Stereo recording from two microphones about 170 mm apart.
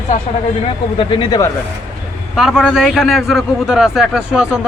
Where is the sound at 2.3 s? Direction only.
5° right (ahead or behind).